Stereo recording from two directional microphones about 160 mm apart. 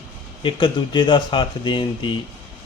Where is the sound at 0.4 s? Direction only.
30° left (ahead or behind).